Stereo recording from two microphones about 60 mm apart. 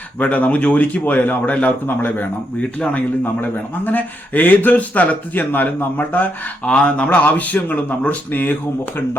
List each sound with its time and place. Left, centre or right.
0.2 s a man's voice: left